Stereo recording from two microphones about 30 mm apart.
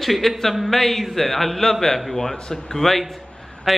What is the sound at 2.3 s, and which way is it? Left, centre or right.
Speech, left.